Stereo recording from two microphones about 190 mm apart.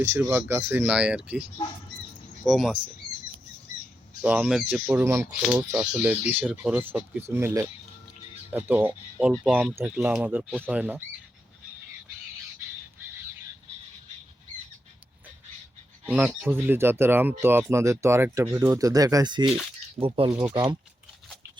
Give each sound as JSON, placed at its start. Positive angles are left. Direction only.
{"t": 0.0, "sound": "speech", "side_deg": -15}
{"t": 4.2, "sound": "speech", "side_deg": -5}
{"t": 16.0, "sound": "speech", "side_deg": -10}